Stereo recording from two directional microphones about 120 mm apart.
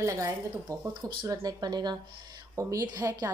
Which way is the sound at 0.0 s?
25° right (ahead or behind).